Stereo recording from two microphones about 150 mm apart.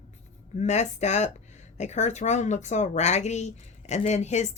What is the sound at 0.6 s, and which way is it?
Speech, 50° left (ahead or behind).